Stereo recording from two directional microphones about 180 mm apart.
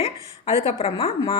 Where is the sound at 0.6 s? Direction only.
35° left (ahead or behind).